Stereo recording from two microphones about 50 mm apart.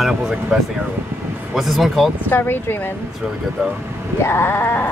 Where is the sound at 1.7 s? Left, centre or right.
Centre.